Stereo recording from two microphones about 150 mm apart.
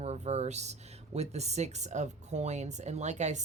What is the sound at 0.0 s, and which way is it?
Speech, 50° right (ahead or behind).